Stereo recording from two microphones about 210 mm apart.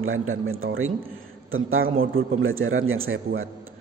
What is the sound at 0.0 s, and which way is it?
A man's voice, 75° right (ahead or behind).